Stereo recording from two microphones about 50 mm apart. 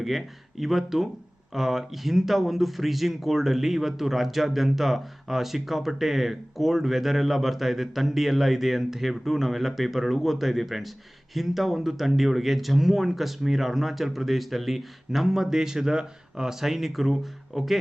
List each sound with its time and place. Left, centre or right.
0.0 s speech: centre